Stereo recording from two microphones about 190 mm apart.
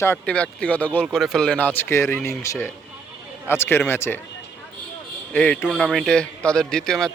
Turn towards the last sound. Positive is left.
turn(degrees=5)  # may be behind; listen again after turning